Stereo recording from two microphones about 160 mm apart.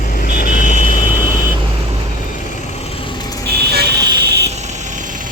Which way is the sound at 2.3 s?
45° left (ahead or behind).